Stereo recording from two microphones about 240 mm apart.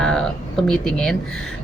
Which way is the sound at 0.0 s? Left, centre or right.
Centre.